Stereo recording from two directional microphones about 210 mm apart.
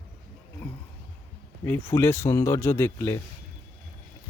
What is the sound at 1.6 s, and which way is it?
Speech, 10° left (ahead or behind).